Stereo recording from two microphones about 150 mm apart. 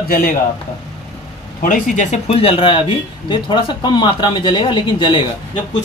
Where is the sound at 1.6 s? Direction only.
60° left (ahead or behind).